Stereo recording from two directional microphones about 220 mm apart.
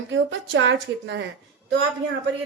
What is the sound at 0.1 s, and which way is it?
A woman's voice, 55° right (ahead or behind).